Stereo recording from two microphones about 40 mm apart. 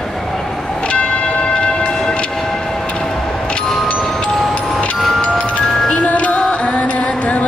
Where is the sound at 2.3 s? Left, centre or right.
Centre.